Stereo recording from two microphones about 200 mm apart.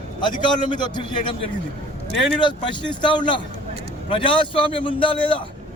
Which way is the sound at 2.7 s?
25° left (ahead or behind).